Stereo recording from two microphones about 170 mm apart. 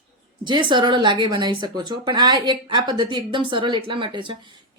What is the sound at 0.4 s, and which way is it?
Speech, 25° right (ahead or behind).